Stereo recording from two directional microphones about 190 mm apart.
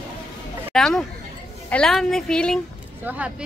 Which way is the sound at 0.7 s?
5° left (ahead or behind).